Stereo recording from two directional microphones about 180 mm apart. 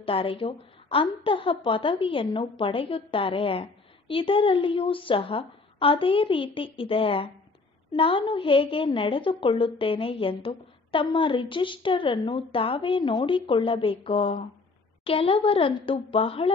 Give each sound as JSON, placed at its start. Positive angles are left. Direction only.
{"t": 0.0, "sound": "a woman's voice", "side_deg": 30}